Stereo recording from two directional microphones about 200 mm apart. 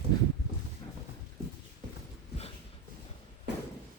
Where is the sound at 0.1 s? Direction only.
20° left (ahead or behind).